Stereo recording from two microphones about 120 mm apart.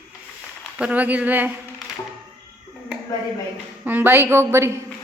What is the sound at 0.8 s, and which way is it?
Speech, 10° right (ahead or behind).